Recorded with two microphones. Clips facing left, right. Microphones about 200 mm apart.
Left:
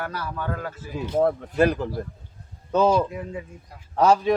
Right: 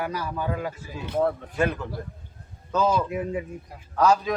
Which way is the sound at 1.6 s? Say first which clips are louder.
Left 5 dB; 35° left (ahead or behind).